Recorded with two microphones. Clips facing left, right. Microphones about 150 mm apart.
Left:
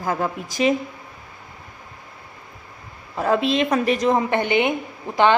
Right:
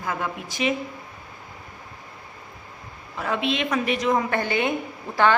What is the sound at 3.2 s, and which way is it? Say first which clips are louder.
Speech: left 6 dB; 35° left (ahead or behind).